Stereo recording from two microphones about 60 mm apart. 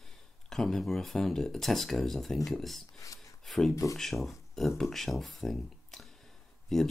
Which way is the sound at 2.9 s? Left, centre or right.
Left.